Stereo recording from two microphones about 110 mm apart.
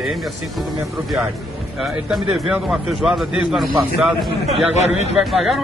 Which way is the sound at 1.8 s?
Centre (ahead or behind).